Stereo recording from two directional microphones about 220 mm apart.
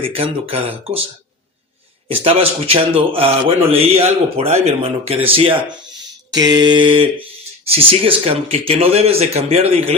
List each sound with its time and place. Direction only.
0.0 s speech: 25° right (ahead or behind)
2.0 s speech: 25° right (ahead or behind)